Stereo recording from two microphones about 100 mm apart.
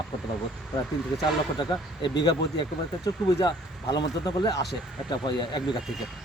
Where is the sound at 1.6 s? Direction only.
50° left (ahead or behind).